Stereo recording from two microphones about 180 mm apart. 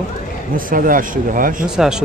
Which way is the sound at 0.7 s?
50° right (ahead or behind).